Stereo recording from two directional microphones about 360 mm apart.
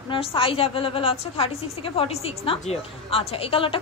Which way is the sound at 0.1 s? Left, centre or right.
Centre.